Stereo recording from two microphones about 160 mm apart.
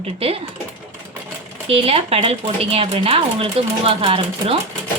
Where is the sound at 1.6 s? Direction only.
35° right (ahead or behind).